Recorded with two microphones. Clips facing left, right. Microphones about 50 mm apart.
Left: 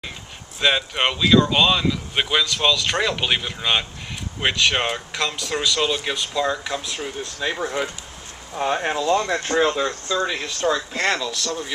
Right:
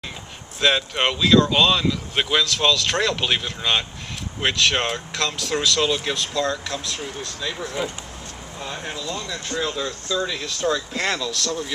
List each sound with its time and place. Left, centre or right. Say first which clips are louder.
0.6 s speech: even; centre; by 7.9 s left
8.5 s speech: left 10 dB; left
9.8 s speech: left 3 dB; left
11.3 s speech: right 1 dB; centre